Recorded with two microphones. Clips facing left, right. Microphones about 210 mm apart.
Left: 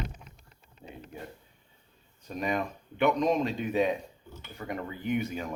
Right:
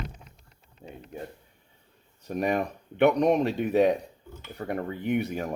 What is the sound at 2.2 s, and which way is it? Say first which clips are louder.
Speech: right 4 dB; 65° right (ahead or behind).